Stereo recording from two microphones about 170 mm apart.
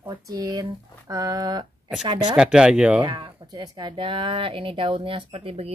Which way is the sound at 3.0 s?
25° right (ahead or behind).